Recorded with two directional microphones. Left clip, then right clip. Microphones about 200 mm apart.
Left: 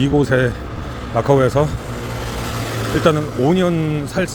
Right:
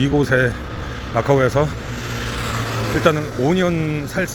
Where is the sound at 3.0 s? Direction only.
15° left (ahead or behind).